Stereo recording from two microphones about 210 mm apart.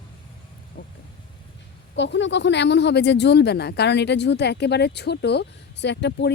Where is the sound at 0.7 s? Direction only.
55° left (ahead or behind).